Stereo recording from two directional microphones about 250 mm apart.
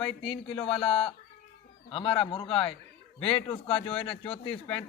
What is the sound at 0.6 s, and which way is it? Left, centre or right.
A man's voice, centre.